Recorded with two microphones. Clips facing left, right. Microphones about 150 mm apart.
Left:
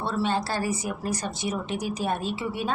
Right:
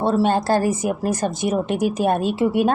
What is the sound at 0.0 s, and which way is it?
Speech, 45° right (ahead or behind).